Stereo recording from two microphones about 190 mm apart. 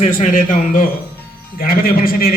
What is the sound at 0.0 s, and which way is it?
A man's voice, 40° left (ahead or behind).